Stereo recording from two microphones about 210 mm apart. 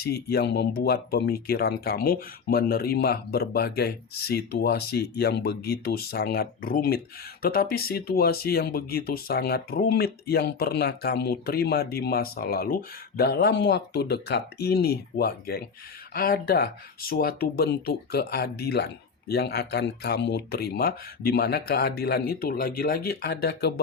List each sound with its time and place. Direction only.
0.0 s speech: 50° left (ahead or behind)